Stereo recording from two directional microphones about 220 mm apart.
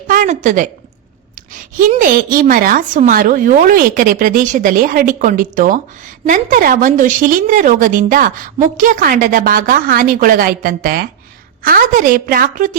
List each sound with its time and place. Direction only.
0.1 s a woman's voice: 35° right (ahead or behind)
1.9 s a woman's voice: 35° right (ahead or behind)